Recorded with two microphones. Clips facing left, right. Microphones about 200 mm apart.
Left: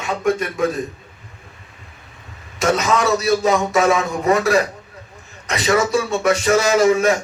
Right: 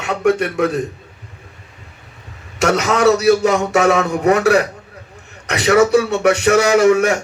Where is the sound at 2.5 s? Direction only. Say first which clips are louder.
Right 2 dB; 70° right (ahead or behind).